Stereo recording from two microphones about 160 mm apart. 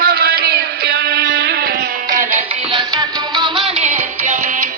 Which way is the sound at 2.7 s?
25° right (ahead or behind).